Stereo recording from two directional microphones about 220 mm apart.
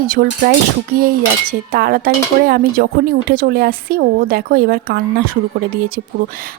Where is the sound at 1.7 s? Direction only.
45° right (ahead or behind).